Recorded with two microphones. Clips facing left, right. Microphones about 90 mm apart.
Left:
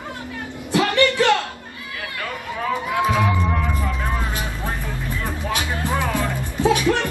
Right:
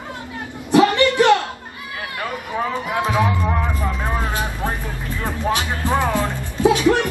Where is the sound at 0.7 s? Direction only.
20° right (ahead or behind).